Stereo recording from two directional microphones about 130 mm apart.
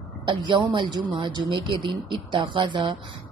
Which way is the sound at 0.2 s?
40° right (ahead or behind).